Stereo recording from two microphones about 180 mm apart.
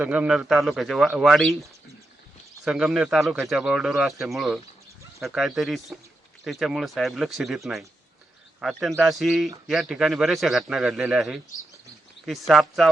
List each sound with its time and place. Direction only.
0.0 s a man's voice: 5° right (ahead or behind)
2.6 s a man's voice: 5° right (ahead or behind)
12.5 s a man's voice: centre (ahead or behind)